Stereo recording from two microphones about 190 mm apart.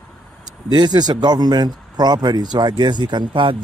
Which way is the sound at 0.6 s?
20° right (ahead or behind).